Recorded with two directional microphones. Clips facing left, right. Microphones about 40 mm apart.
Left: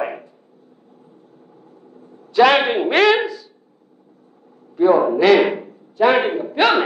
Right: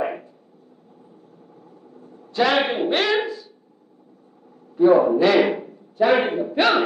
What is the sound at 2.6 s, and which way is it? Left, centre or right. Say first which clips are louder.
Speech: left 3 dB; centre.